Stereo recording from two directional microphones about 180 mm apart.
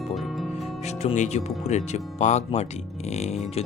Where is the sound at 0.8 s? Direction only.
40° left (ahead or behind).